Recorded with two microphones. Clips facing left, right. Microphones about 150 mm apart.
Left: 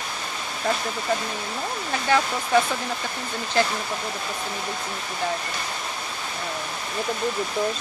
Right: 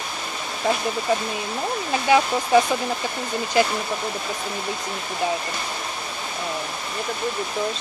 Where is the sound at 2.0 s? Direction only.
15° right (ahead or behind).